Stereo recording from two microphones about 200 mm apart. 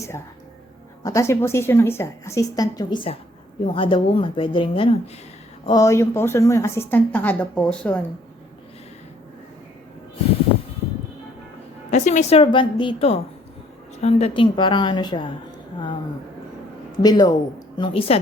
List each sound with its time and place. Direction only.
1.0 s a woman's voice: 15° left (ahead or behind)
5.6 s a woman's voice: 15° left (ahead or behind)
11.9 s a woman's voice: 35° left (ahead or behind)
17.0 s a woman's voice: 20° left (ahead or behind)